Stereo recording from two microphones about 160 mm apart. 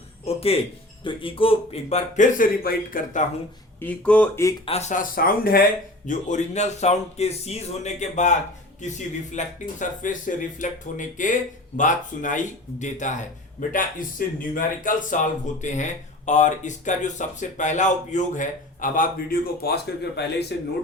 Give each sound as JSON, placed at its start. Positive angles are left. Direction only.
{"t": 0.3, "sound": "music", "side_deg": 35}
{"t": 1.0, "sound": "speech", "side_deg": 35}
{"t": 3.8, "sound": "speech", "side_deg": 10}
{"t": 4.6, "sound": "speech", "side_deg": 40}
{"t": 6.1, "sound": "speech", "side_deg": 50}